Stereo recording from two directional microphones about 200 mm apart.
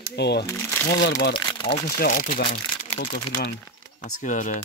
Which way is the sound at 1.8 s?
45° left (ahead or behind).